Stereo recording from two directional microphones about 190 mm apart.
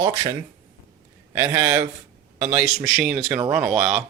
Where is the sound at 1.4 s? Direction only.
15° right (ahead or behind).